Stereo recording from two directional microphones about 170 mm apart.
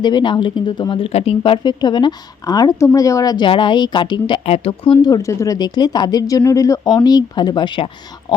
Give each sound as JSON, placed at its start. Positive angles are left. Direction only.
{"t": 0.0, "sound": "speech", "side_deg": 25}